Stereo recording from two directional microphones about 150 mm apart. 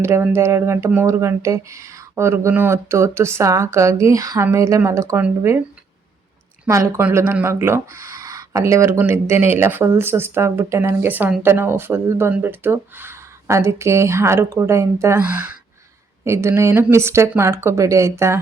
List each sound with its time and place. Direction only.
0.0 s speech: 15° right (ahead or behind)
6.7 s speech: 20° right (ahead or behind)